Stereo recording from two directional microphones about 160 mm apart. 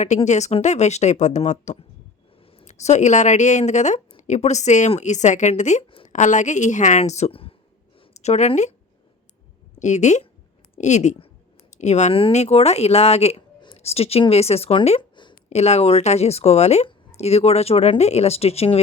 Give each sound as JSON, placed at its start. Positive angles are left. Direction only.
{"t": 0.3, "sound": "speech", "side_deg": 45}
{"t": 9.7, "sound": "speech", "side_deg": 50}
{"t": 15.4, "sound": "a woman's voice", "side_deg": 45}